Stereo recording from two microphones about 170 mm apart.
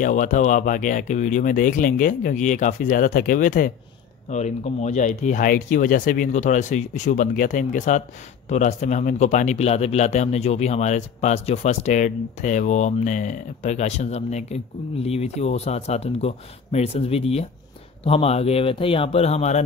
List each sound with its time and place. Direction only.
0.0 s speech: 50° left (ahead or behind)